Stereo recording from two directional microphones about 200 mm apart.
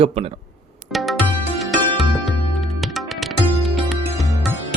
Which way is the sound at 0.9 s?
Centre (ahead or behind).